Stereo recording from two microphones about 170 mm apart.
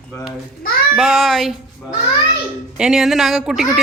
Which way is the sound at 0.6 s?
60° left (ahead or behind).